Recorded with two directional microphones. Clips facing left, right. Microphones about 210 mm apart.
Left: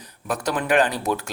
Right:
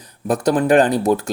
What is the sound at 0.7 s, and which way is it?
Speech, 50° right (ahead or behind).